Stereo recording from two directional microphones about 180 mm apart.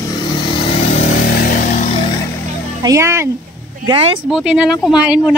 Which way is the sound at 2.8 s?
15° right (ahead or behind).